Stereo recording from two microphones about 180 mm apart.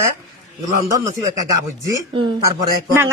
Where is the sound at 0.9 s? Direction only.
20° right (ahead or behind).